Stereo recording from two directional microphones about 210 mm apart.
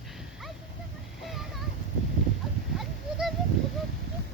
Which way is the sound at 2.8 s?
Centre (ahead or behind).